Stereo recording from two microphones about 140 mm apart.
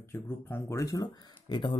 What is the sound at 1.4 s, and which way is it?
Speech, 35° left (ahead or behind).